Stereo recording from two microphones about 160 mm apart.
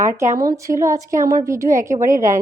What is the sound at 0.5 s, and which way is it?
A woman's voice, 20° right (ahead or behind).